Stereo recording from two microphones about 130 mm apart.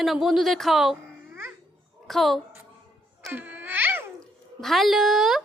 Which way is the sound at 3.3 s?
15° right (ahead or behind).